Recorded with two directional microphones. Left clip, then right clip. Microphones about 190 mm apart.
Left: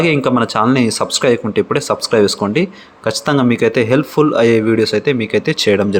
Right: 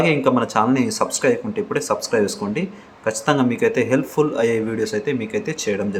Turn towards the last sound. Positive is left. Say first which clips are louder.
# left 10 dB
turn(degrees=30)  # may be behind; listen again after turning